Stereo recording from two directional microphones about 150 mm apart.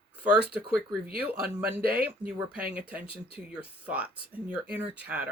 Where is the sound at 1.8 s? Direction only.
85° right.